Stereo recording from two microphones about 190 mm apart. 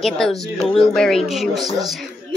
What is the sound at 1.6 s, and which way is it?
Speech, 20° right (ahead or behind).